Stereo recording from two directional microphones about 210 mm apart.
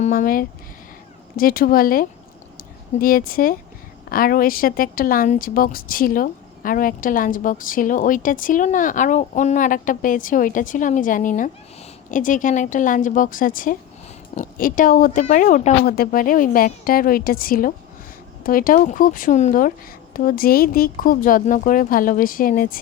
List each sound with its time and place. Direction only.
0.0 s speech: 40° left (ahead or behind)